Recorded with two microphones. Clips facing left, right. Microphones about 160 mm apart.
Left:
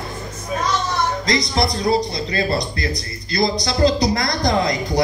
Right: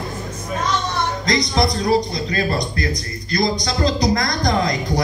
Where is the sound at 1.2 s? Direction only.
30° left (ahead or behind).